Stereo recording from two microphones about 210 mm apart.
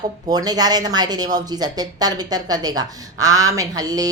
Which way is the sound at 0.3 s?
20° right (ahead or behind).